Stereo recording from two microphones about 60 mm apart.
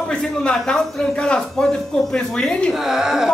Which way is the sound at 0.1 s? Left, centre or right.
Centre.